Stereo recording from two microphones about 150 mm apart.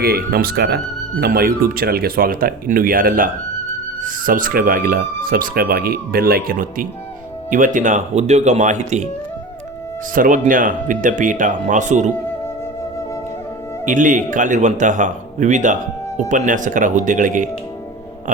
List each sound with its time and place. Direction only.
0.0 s speech: 90° right; by 6.8 s 70° right (ahead or behind)
7.5 s speech: 60° right (ahead or behind)
10.2 s speech: 60° right (ahead or behind)
13.8 s speech: 60° right (ahead or behind)